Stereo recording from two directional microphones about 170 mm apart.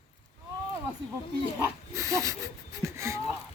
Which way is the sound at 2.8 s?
15° right (ahead or behind).